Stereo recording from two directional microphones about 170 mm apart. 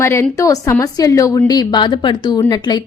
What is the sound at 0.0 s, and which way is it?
A woman's voice, 15° left (ahead or behind).